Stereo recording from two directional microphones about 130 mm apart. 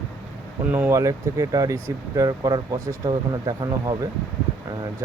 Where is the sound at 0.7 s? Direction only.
20° right (ahead or behind).